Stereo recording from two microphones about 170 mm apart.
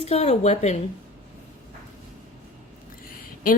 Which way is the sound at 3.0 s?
55° left (ahead or behind).